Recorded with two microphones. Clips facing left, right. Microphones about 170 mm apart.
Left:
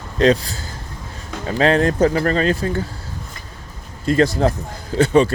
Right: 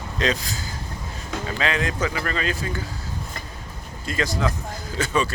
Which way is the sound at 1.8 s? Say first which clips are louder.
Left 10 dB; 55° left (ahead or behind).